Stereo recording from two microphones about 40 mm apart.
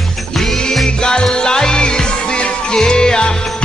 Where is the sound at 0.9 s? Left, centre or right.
Left.